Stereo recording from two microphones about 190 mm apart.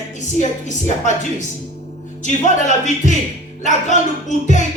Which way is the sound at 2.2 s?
40° left (ahead or behind).